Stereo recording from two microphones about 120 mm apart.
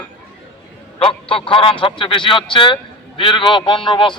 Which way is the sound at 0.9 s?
50° left (ahead or behind).